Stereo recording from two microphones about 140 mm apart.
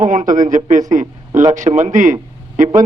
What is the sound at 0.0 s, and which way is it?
A man's voice, 65° right (ahead or behind).